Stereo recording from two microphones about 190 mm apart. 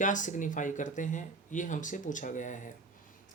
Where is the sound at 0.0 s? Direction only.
40° left (ahead or behind).